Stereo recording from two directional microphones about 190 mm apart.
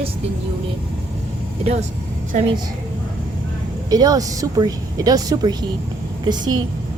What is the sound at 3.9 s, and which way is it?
Speech, 20° right (ahead or behind).